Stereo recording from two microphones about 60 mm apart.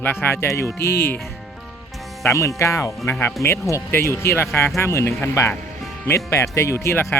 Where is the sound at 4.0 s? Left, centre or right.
Left.